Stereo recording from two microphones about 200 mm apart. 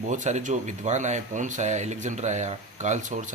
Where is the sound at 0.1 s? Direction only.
40° right (ahead or behind).